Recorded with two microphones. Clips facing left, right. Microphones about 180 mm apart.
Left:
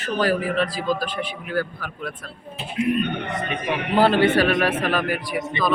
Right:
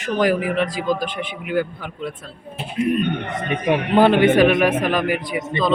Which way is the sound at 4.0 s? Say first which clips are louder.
Right 3 dB; 20° right (ahead or behind).